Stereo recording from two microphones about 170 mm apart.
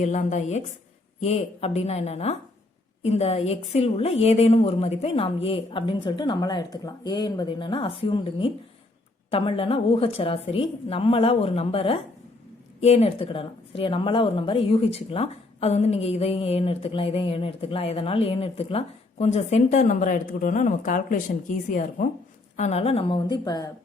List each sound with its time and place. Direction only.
0.0 s a woman's voice: 45° left (ahead or behind); by 23.7 s 20° left (ahead or behind)